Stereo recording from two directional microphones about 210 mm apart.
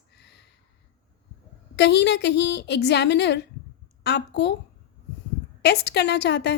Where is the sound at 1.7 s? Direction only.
55° left (ahead or behind).